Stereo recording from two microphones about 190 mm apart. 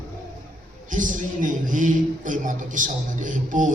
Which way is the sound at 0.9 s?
45° right (ahead or behind).